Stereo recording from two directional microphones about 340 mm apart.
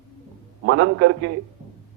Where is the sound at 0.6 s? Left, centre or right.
Right.